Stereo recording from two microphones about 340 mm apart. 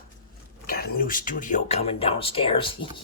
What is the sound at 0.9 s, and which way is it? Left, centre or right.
Speech, left.